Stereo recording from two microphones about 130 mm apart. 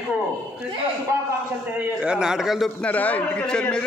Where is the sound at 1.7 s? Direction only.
10° right (ahead or behind).